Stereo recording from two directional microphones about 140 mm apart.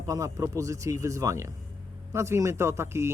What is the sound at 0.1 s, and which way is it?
Speech, 25° right (ahead or behind).